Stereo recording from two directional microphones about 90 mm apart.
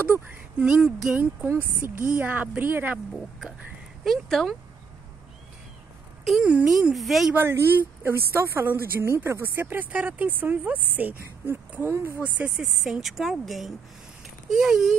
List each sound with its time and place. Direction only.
0.6 s speech: 10° right (ahead or behind)
3.1 s speech: centre (ahead or behind)
6.4 s speech: 15° right (ahead or behind)
6.7 s speech: centre (ahead or behind)
7.3 s speech: 25° right (ahead or behind)
12.2 s speech: 15° right (ahead or behind)
12.8 s speech: 5° right (ahead or behind)